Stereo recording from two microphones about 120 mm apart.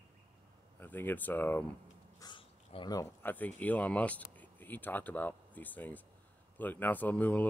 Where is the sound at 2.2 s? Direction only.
40° left (ahead or behind).